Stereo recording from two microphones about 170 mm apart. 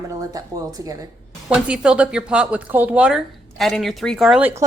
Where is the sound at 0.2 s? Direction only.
20° right (ahead or behind).